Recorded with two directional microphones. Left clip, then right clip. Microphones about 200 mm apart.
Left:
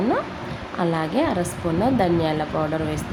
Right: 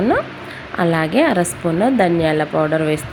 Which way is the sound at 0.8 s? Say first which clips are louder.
Right 7 dB; 15° right (ahead or behind).